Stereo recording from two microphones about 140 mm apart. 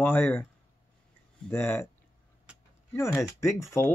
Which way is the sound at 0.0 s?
15° left (ahead or behind).